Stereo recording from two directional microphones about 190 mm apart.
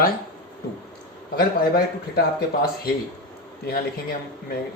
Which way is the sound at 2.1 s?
55° left (ahead or behind).